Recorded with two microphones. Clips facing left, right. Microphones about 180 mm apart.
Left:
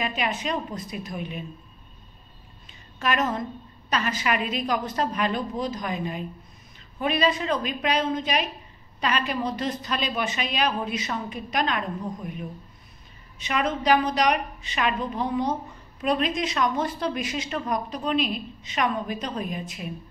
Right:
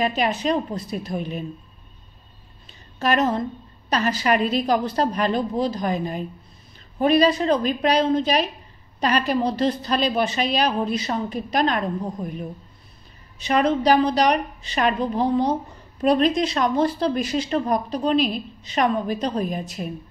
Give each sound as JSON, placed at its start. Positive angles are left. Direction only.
{"t": 0.0, "sound": "speech", "side_deg": -35}
{"t": 2.6, "sound": "a sound", "side_deg": -35}
{"t": 3.9, "sound": "speech", "side_deg": -35}